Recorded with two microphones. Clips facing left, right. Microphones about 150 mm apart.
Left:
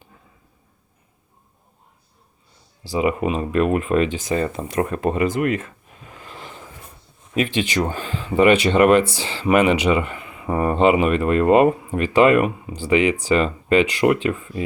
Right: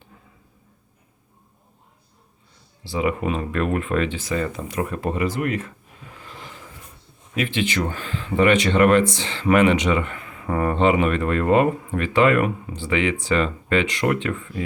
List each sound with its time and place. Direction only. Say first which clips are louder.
2.9 s speech: left 3 dB; 20° left (ahead or behind)
6.1 s a sound: left 2 dB; 20° left (ahead or behind)
7.3 s speech: left 2 dB; 20° left (ahead or behind)
7.8 s speech: left 3 dB; 35° left (ahead or behind)
8.0 s speech: left 3 dB; 15° left (ahead or behind)